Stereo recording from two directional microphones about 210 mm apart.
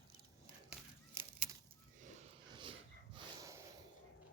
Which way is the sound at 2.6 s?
25° right (ahead or behind).